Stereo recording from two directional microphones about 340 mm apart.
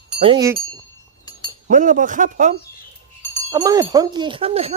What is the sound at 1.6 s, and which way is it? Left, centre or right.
Speech, right.